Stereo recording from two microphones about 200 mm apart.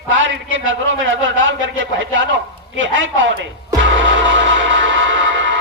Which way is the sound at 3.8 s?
65° right (ahead or behind).